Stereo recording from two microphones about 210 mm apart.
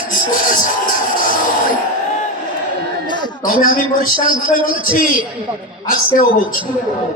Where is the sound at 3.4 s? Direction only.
40° left (ahead or behind).